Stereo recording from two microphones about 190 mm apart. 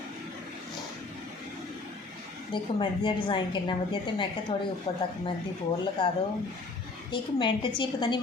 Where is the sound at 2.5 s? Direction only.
25° left (ahead or behind).